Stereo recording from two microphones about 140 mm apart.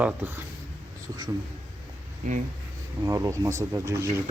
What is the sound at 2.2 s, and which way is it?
Speech, 65° right (ahead or behind).